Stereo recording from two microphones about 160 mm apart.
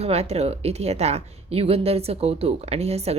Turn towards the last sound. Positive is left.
turn(degrees=-40)  # may be behind; listen again after turning